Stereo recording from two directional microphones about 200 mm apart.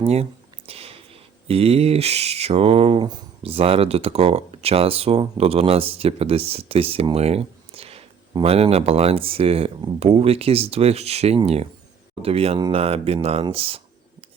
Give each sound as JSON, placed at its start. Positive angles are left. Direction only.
{"t": 0.0, "sound": "speech", "side_deg": -30}